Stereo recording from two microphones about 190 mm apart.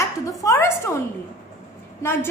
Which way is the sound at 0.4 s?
15° left (ahead or behind).